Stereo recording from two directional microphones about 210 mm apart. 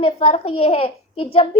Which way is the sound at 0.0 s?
30° left (ahead or behind).